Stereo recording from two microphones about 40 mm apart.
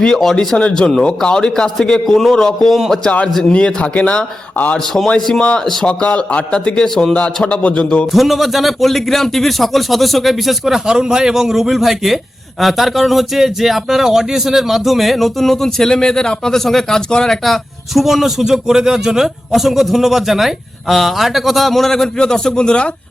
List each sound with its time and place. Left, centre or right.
0.0 s a man's voice: centre
0.3 s a man's voice: left
3.5 s a man's voice: left
5.4 s speech: left
6.8 s a man's voice: centre
7.4 s speech: left
8.1 s a man's voice: centre
17.1 s speech: centre
17.4 s a man's voice: centre; by 22.9 s left